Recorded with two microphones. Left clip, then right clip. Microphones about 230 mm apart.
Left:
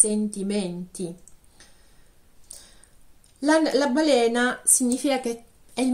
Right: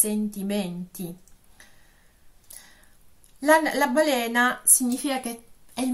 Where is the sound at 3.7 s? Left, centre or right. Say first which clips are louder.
Left 2 dB; right.